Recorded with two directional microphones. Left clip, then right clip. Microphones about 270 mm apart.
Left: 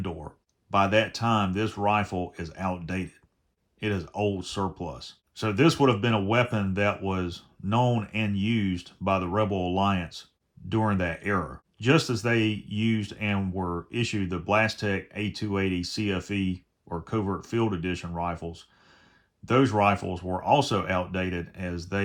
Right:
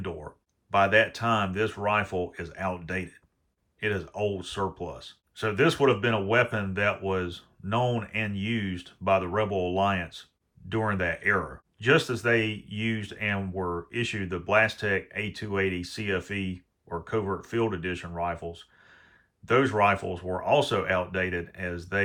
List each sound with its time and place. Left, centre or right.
0.7 s speech: centre